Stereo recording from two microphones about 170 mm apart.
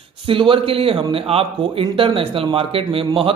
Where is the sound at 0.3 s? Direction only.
30° right (ahead or behind).